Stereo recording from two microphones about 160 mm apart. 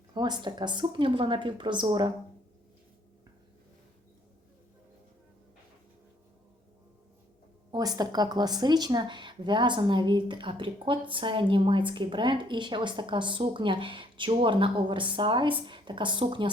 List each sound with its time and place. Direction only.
0.1 s a woman's voice: 25° right (ahead or behind)
7.7 s a woman's voice: 25° right (ahead or behind)